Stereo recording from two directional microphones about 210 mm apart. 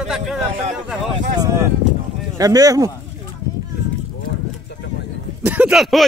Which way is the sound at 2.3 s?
15° right (ahead or behind).